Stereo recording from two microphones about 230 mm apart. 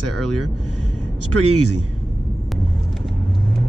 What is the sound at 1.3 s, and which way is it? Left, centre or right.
Speech, right.